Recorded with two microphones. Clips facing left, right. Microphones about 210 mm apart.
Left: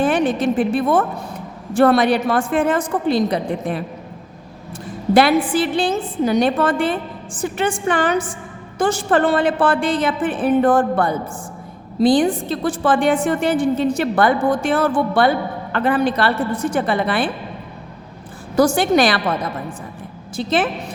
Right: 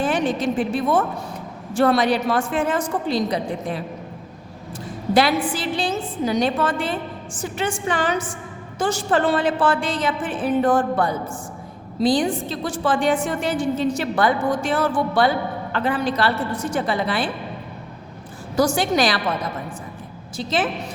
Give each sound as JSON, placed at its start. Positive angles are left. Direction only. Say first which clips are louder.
{"t": 0.0, "sound": "a woman's voice", "louder": "left 4 dB", "side_deg": 55}
{"t": 5.1, "sound": "a woman's voice", "louder": "left 5 dB", "side_deg": 55}
{"t": 18.5, "sound": "a woman's voice", "louder": "left 4 dB", "side_deg": 55}
{"t": 20.3, "sound": "a woman's voice", "louder": "left 4 dB", "side_deg": 55}